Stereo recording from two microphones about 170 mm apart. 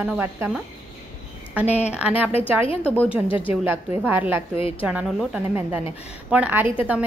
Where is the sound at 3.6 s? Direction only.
10° right (ahead or behind).